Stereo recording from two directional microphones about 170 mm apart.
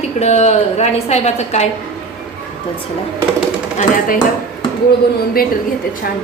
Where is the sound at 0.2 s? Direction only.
40° left (ahead or behind).